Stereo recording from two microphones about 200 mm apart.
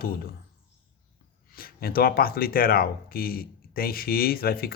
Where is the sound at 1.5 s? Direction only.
50° left (ahead or behind).